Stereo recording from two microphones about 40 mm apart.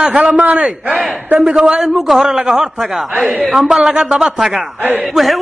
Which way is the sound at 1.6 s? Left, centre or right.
Right.